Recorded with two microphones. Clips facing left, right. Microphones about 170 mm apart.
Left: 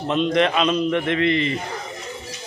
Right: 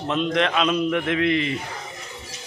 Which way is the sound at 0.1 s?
Centre (ahead or behind).